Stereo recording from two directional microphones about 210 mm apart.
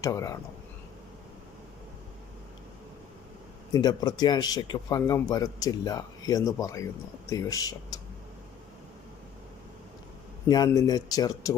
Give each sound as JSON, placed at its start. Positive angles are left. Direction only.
{"t": 0.0, "sound": "speech", "side_deg": 15}
{"t": 3.7, "sound": "speech", "side_deg": 20}
{"t": 10.5, "sound": "speech", "side_deg": 20}